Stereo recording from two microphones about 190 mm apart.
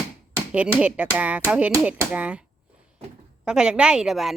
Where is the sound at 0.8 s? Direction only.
5° right (ahead or behind).